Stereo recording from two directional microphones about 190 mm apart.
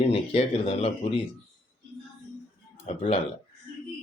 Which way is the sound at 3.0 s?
30° left (ahead or behind).